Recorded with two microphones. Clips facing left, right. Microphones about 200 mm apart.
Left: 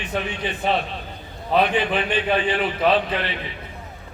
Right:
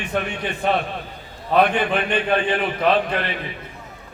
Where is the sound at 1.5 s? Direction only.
55° right (ahead or behind).